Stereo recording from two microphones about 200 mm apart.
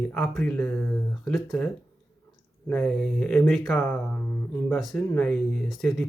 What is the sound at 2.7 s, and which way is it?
Speech, 5° left (ahead or behind).